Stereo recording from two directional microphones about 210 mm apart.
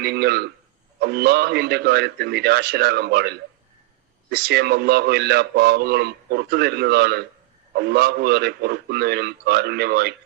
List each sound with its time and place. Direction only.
0.0 s a man's voice: 50° right (ahead or behind)